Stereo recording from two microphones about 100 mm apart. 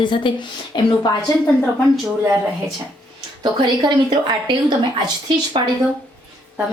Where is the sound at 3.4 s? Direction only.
45° right (ahead or behind).